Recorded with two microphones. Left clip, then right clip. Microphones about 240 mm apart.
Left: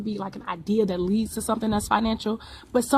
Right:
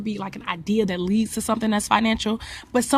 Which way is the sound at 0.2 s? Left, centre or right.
Right.